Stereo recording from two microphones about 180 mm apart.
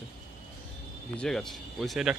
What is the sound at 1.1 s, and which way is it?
Speech, 5° left (ahead or behind).